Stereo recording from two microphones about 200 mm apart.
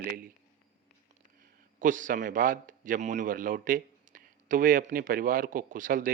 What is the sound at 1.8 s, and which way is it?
A man's voice, 40° right (ahead or behind).